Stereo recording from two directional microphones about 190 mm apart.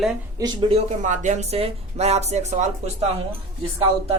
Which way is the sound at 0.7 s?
40° right (ahead or behind).